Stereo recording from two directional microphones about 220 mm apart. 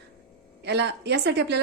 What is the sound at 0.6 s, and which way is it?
Speech, 50° right (ahead or behind).